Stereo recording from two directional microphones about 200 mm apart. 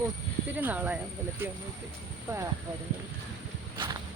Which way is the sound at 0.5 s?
10° right (ahead or behind).